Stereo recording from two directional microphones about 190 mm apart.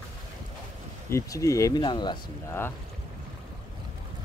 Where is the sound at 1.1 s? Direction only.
15° left (ahead or behind).